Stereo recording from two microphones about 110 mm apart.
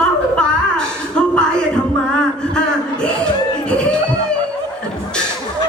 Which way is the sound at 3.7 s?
10° left (ahead or behind).